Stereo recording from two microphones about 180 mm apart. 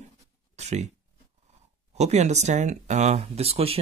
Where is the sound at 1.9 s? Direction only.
40° right (ahead or behind).